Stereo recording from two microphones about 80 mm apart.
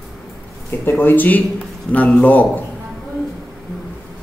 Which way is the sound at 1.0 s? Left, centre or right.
Left.